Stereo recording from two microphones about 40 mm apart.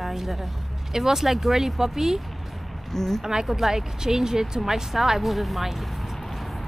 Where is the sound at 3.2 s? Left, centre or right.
Centre.